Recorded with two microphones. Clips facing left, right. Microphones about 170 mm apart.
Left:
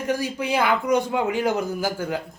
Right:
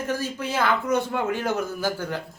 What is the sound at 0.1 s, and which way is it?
Speech, 15° left (ahead or behind).